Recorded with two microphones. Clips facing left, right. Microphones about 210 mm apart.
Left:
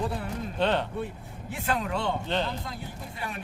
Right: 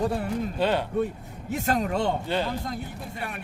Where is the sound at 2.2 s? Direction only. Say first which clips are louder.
Right 2 dB; 10° right (ahead or behind).